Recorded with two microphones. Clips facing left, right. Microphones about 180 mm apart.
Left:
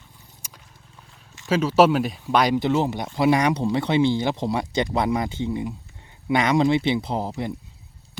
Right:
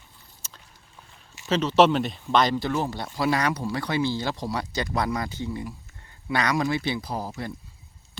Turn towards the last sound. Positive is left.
turn(degrees=20)  # may be behind; listen again after turning